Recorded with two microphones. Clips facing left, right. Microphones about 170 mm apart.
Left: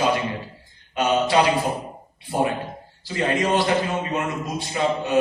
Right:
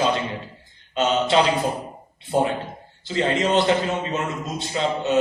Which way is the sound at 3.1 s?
25° right (ahead or behind).